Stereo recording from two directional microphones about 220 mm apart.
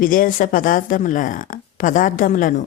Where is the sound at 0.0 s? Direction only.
40° left (ahead or behind).